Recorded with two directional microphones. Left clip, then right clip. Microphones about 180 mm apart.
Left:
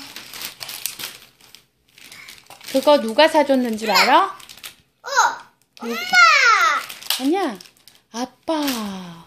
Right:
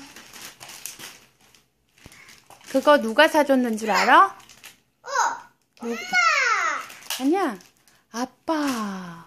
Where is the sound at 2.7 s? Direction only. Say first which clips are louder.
Left 2 dB; 10° right (ahead or behind).